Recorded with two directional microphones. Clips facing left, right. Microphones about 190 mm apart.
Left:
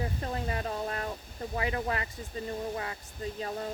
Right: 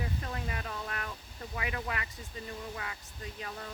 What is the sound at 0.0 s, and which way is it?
Speech, 35° left (ahead or behind).